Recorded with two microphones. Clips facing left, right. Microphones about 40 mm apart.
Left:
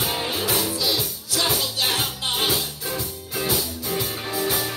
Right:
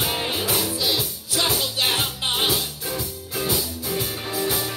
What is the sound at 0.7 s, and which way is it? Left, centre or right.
Music, centre.